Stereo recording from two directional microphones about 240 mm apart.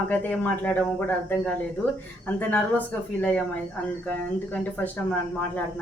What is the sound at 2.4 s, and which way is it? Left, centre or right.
Speech, centre.